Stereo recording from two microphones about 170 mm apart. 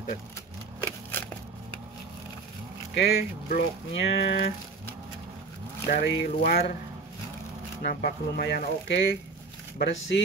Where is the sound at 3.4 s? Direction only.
60° left (ahead or behind).